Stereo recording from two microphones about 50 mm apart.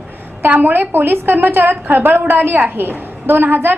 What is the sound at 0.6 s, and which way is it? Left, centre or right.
A woman's voice, right.